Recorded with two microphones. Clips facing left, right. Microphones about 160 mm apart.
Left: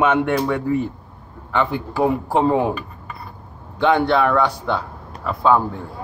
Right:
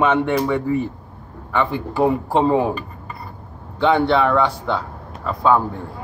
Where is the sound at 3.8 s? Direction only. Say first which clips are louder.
Even; 10° left (ahead or behind).